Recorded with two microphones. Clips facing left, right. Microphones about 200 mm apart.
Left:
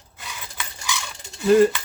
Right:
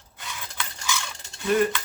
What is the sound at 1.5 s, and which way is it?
Coin, 30° left (ahead or behind).